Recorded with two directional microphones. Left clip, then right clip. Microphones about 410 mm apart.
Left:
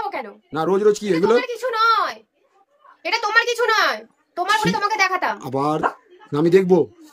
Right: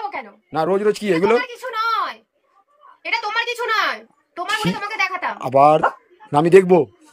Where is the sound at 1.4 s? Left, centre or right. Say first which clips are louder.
Left 4 dB; centre.